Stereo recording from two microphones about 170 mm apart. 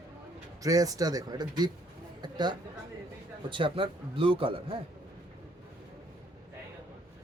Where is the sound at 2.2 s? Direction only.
25° right (ahead or behind).